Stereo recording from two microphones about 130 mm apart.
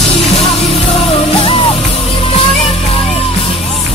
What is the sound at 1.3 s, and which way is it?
Music, 45° left (ahead or behind).